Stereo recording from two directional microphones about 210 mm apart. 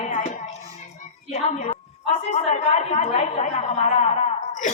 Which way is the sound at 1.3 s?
30° left (ahead or behind).